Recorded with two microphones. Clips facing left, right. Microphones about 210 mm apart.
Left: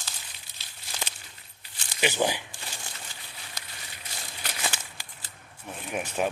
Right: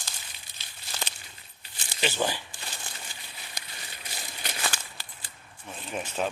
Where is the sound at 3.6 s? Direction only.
15° right (ahead or behind).